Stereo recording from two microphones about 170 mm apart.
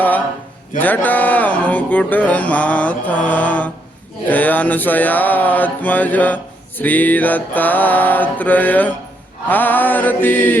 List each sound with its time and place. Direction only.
0.8 s mantra: 10° left (ahead or behind)